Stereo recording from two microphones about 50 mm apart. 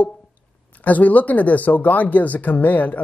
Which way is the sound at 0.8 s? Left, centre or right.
Left.